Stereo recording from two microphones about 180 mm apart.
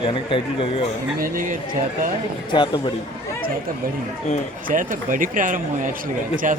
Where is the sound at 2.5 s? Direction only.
25° left (ahead or behind).